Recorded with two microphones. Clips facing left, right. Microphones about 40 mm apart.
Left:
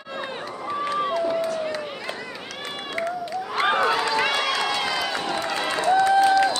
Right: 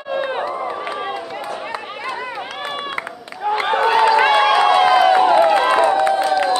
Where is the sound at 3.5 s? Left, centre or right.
Centre.